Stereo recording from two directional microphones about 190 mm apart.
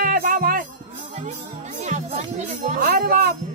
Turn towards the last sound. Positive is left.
turn(degrees=-50)  # may be behind; listen again after turning